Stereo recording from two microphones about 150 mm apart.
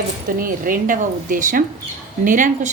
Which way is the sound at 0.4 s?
65° right (ahead or behind).